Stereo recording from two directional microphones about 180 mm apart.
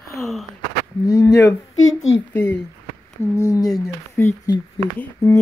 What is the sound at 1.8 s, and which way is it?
Speech, 90° left.